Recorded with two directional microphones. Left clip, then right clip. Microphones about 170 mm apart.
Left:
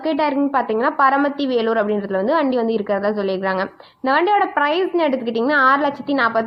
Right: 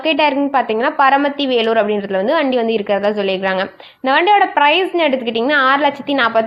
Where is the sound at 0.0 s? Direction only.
30° right (ahead or behind).